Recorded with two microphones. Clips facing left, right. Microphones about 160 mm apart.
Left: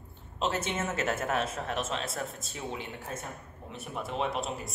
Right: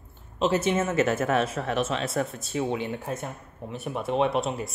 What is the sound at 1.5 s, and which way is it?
Speech, 90° right.